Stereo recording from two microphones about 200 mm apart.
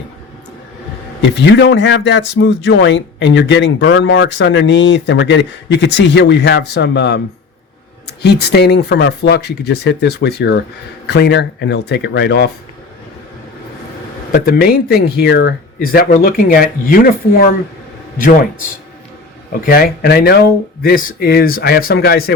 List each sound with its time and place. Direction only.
1.2 s speech: 65° left (ahead or behind)
14.3 s speech: 50° left (ahead or behind)
19.6 s speech: 45° left (ahead or behind)